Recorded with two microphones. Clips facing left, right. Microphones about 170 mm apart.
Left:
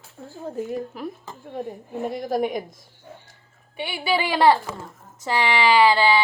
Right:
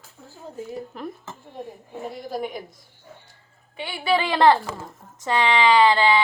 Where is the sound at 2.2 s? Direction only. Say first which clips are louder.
Left 6 dB; 80° left.